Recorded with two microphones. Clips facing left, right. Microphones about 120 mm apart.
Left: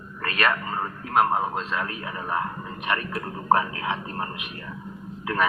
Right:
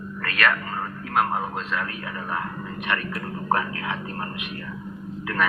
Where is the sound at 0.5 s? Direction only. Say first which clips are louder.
Left 1 dB; 20° left (ahead or behind).